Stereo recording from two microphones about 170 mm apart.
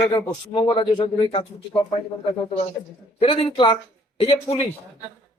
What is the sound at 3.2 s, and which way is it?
Speech, 35° left (ahead or behind).